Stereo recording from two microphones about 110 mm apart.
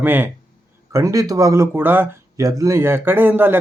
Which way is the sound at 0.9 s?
30° right (ahead or behind).